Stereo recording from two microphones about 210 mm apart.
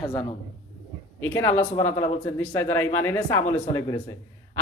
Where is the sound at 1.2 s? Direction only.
10° left (ahead or behind).